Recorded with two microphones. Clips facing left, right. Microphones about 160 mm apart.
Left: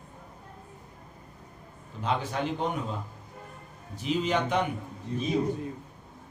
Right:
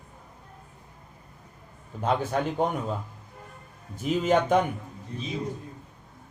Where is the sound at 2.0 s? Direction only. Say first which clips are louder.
Right 4 dB; 50° right (ahead or behind).